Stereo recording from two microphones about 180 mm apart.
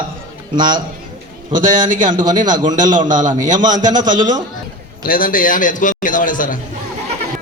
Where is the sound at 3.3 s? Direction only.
45° right (ahead or behind).